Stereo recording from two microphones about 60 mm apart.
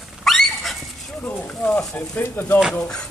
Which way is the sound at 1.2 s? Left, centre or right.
Left.